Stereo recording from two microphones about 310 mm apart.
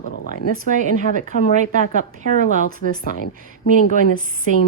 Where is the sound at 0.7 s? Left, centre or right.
Right.